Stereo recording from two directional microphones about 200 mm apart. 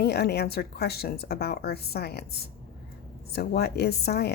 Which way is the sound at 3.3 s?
55° left (ahead or behind).